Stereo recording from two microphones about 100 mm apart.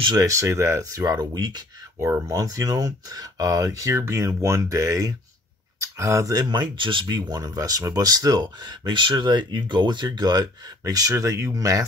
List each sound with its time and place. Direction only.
0.2 s speech: 30° right (ahead or behind)
6.5 s speech: 50° right (ahead or behind); by 11.8 s 35° right (ahead or behind)